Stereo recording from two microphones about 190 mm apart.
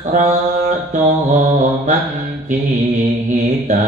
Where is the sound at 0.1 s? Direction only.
40° right (ahead or behind).